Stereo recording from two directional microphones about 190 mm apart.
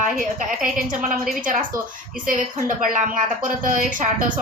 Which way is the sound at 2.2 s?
45° right (ahead or behind).